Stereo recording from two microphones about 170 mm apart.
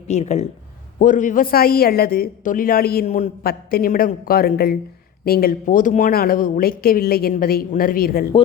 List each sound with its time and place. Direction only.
0.1 s speech: 40° left (ahead or behind); by 8.2 s 60° left (ahead or behind)